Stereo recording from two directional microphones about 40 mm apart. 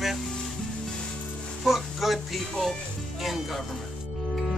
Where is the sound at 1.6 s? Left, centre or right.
Centre.